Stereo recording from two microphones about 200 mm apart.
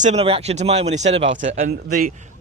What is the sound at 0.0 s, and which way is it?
A man's voice, 30° right (ahead or behind).